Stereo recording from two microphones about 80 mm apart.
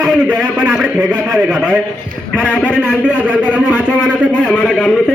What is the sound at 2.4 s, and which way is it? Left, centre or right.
Speech, centre.